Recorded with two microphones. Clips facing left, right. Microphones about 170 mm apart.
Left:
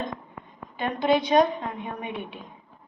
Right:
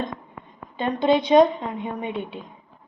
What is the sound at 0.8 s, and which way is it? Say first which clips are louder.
A woman's voice: right 3 dB; 25° right (ahead or behind).